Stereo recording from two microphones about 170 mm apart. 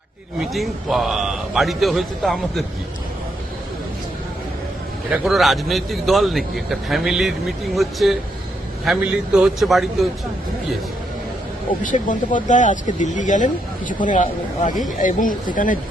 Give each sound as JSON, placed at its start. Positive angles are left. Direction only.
{"t": 0.5, "sound": "a man's voice", "side_deg": 0}
{"t": 5.1, "sound": "a man's voice", "side_deg": 0}
{"t": 11.8, "sound": "speech", "side_deg": 50}